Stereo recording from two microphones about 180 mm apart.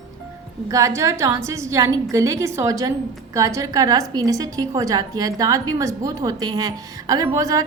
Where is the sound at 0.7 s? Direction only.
15° right (ahead or behind).